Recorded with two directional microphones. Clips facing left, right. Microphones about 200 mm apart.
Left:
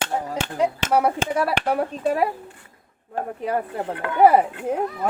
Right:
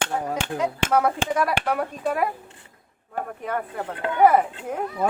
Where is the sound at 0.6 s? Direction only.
30° left (ahead or behind).